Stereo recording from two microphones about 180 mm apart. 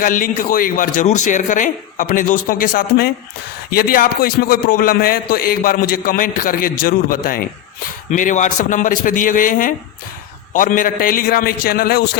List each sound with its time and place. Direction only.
0.0 s a man's voice: 50° left (ahead or behind)